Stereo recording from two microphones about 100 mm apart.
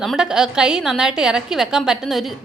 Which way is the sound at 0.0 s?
5° right (ahead or behind).